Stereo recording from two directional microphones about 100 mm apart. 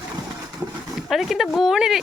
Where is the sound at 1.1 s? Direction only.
Centre (ahead or behind).